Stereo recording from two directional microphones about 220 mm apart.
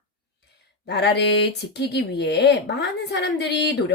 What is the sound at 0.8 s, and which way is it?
Speech, 50° left (ahead or behind).